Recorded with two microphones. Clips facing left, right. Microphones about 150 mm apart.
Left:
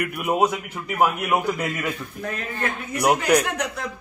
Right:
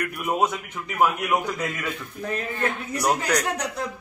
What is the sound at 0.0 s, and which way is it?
A man's voice, 5° left (ahead or behind).